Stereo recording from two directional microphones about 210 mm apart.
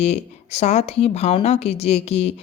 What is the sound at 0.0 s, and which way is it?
Speech, 30° left (ahead or behind).